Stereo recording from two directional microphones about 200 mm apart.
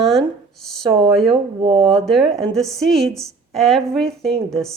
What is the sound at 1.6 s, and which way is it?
Speech, 30° right (ahead or behind).